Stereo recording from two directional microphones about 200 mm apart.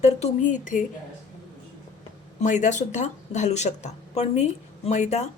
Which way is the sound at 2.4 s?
40° left (ahead or behind).